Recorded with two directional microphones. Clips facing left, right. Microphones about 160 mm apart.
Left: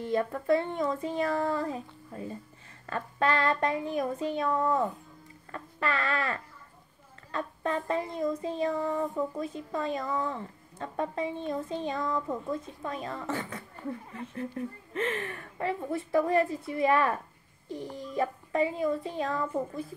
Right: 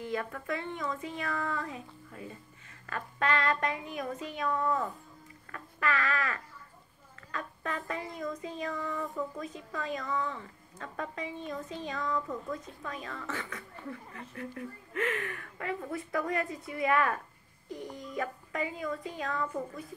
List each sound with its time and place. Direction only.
0.0 s a woman's voice: 35° left (ahead or behind)